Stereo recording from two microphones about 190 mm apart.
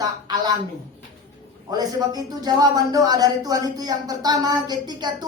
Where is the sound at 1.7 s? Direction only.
20° right (ahead or behind).